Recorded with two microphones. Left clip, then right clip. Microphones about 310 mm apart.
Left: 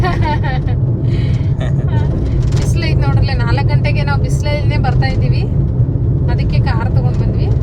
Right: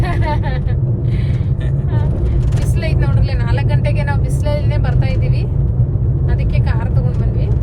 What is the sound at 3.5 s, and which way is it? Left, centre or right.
Vehicle, centre.